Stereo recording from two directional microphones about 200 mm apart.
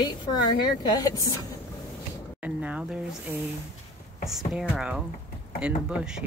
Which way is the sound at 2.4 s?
5° right (ahead or behind).